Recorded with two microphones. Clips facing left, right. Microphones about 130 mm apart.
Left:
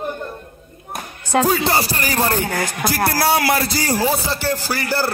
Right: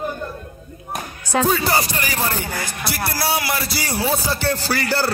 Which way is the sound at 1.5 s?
25° left (ahead or behind).